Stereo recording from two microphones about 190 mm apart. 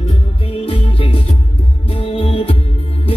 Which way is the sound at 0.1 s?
30° left (ahead or behind).